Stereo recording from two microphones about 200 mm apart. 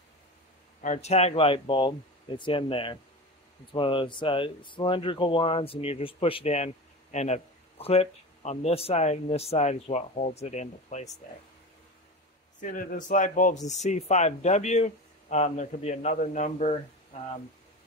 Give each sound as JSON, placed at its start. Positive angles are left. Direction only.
{"t": 0.8, "sound": "speech", "side_deg": 35}
{"t": 12.5, "sound": "speech", "side_deg": 40}